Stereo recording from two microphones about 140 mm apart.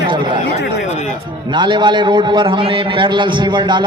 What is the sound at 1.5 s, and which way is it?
A man's voice, 35° right (ahead or behind).